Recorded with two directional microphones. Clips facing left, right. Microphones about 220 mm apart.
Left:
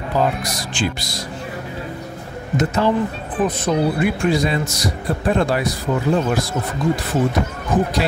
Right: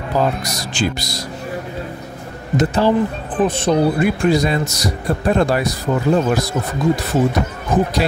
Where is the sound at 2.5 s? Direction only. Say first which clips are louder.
Right 3 dB; 30° right (ahead or behind).